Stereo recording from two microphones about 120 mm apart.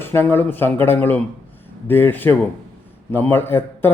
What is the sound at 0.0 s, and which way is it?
A man's voice, 20° left (ahead or behind).